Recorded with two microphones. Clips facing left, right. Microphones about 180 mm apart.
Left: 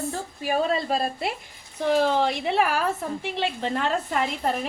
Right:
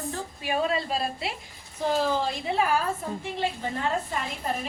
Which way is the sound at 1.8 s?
70° left (ahead or behind).